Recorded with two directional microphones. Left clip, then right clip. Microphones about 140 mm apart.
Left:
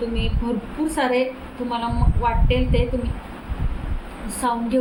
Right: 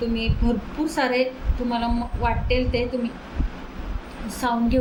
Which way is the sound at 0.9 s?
15° right (ahead or behind).